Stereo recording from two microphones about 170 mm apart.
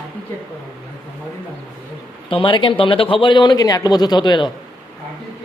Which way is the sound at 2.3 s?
30° left (ahead or behind).